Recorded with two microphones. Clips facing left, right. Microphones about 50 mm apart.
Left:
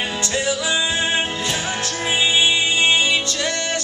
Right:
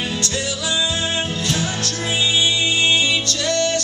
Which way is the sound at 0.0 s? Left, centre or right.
Left.